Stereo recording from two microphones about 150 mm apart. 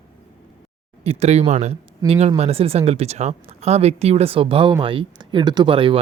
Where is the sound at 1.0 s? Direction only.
45° right (ahead or behind).